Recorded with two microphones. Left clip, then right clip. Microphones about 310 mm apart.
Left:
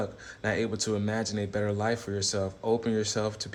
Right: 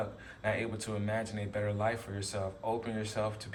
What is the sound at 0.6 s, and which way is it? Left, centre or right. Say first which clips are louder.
Speech: left 7 dB; centre.